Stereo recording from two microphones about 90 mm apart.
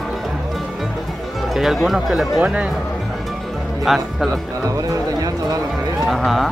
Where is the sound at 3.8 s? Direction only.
Centre (ahead or behind).